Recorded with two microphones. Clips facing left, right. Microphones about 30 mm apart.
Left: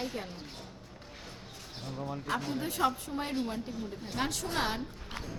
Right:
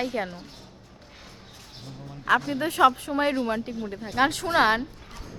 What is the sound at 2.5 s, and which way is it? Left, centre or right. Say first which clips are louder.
A woman's voice: right 8 dB; right.